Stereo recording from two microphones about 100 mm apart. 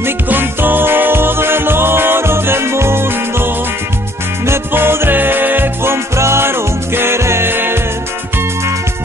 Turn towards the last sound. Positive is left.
turn(degrees=-20)  # may be behind; listen again after turning